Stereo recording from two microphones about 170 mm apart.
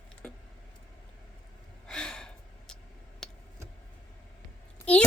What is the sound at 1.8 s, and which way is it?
Gasp, 5° left (ahead or behind).